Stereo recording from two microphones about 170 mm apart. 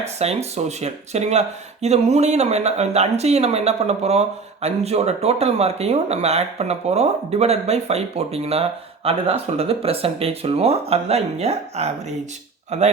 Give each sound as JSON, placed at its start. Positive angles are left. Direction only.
{"t": 0.2, "sound": "speech", "side_deg": -40}